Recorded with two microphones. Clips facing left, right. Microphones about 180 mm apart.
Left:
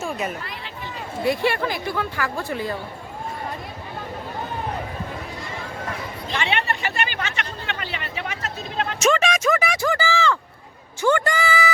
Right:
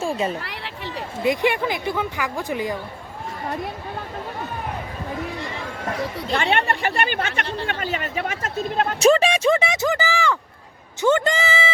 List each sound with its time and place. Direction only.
0.0 s chatter: 30° right (ahead or behind)
0.4 s a sound: 70° right (ahead or behind)
1.2 s speech: 15° right (ahead or behind)
6.3 s speech: 50° right (ahead or behind)
9.0 s speech: 35° right (ahead or behind); by 10.3 s 15° right (ahead or behind)
11.0 s a sound: 20° right (ahead or behind)